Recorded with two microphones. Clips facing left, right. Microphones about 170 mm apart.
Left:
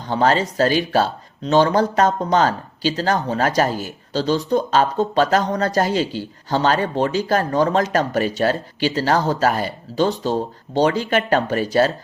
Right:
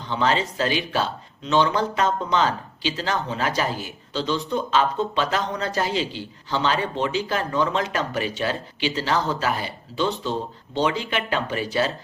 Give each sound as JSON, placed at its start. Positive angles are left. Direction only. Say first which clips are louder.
{"t": 0.0, "sound": "speech", "louder": "left 5 dB", "side_deg": 45}